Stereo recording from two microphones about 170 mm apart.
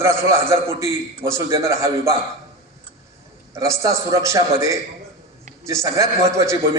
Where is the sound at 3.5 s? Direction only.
20° right (ahead or behind).